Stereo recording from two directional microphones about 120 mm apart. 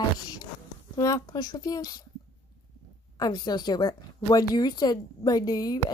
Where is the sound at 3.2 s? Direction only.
35° left (ahead or behind).